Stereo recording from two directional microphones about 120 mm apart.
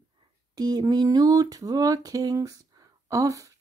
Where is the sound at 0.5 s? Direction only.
35° right (ahead or behind).